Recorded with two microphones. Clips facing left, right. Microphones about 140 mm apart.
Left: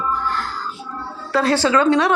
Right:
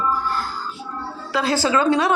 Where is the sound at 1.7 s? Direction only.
25° right (ahead or behind).